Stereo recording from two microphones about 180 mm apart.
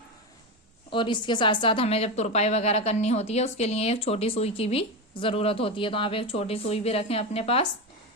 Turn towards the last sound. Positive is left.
turn(degrees=35)  # may be behind; listen again after turning